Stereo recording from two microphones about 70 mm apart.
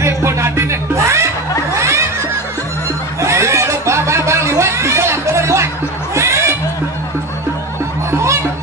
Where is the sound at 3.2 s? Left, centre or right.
Right.